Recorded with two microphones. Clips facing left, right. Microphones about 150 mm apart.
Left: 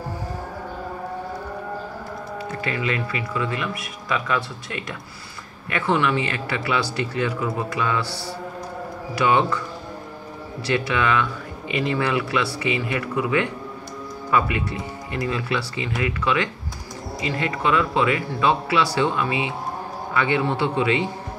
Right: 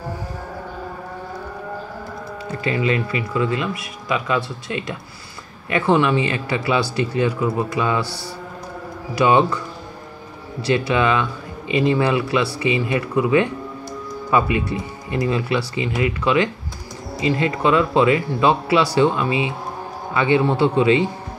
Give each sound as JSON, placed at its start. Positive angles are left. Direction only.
{"t": 2.6, "sound": "speech", "side_deg": -25}
{"t": 9.2, "sound": "speech", "side_deg": -20}
{"t": 10.7, "sound": "speech", "side_deg": -20}